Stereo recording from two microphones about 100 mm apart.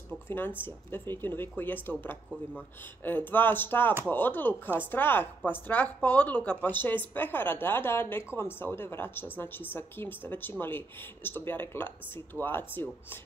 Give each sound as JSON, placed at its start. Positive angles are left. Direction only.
{"t": 0.6, "sound": "a woman's voice", "side_deg": 20}